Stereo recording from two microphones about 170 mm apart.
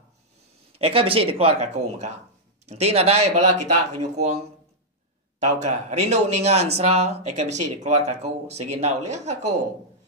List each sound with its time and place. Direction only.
0.7 s speech: 35° right (ahead or behind)